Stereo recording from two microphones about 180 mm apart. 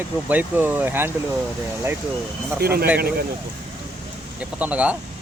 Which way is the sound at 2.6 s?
60° right (ahead or behind).